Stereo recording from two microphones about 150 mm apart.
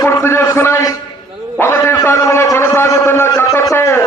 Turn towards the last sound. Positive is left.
turn(degrees=15)  # may be behind; listen again after turning